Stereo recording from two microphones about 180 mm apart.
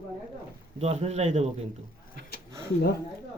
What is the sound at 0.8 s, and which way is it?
Speech, 35° right (ahead or behind).